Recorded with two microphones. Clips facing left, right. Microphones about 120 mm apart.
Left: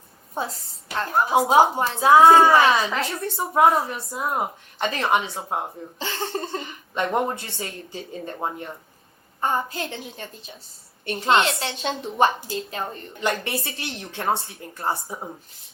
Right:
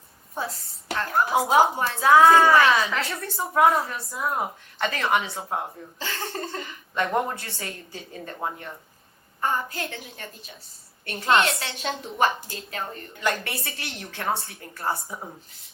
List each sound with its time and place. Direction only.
0.9 s speech: 25° left (ahead or behind)